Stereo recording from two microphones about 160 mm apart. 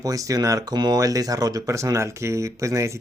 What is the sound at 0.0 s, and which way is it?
Speech, 20° right (ahead or behind).